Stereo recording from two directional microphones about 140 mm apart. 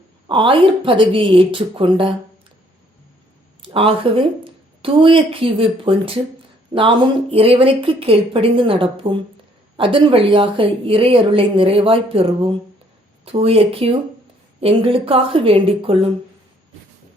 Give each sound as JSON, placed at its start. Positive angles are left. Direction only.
{"t": 0.3, "sound": "a woman's voice", "side_deg": -35}
{"t": 3.6, "sound": "a woman's voice", "side_deg": -40}